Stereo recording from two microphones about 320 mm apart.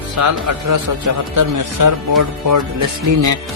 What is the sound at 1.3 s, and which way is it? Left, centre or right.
Speech, right.